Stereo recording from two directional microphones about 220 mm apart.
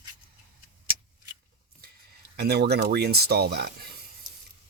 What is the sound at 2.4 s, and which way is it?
Speech, 45° right (ahead or behind).